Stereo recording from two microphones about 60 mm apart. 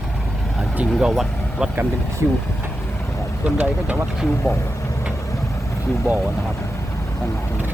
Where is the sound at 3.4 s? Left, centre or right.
Centre.